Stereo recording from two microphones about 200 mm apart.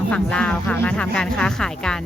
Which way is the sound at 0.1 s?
5° left (ahead or behind).